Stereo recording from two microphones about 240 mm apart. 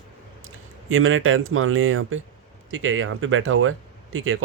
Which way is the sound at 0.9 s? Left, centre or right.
Right.